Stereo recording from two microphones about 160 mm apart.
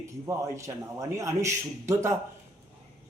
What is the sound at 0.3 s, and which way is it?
A man's voice, 20° right (ahead or behind).